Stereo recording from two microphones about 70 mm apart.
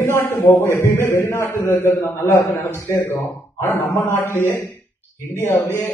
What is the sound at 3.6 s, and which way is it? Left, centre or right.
A man's voice, left.